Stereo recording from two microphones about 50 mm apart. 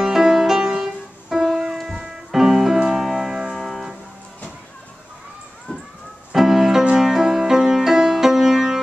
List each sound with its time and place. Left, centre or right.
0.0 s music: centre
5.7 s a sound: left
6.3 s music: centre